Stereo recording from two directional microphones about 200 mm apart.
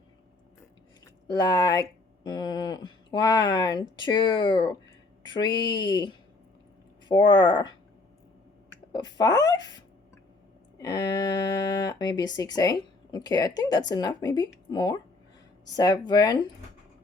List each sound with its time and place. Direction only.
1.3 s speech: 20° left (ahead or behind)
8.9 s speech: 20° left (ahead or behind)